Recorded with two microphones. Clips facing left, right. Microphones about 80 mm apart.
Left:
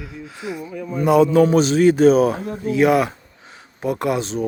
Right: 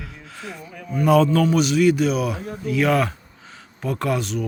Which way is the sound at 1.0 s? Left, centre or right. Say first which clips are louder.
Left 2 dB; centre.